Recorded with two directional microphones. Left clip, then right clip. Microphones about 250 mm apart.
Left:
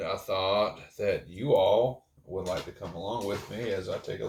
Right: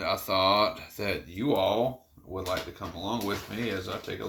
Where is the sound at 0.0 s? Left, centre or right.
Right.